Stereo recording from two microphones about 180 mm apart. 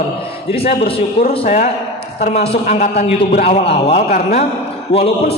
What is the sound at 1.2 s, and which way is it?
A man's voice, 45° left (ahead or behind).